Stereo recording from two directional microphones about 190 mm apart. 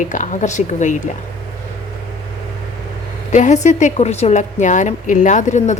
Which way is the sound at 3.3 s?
40° left (ahead or behind).